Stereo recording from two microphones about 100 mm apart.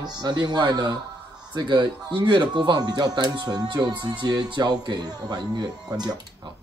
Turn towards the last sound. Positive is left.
turn(degrees=-40)  # may be behind; listen again after turning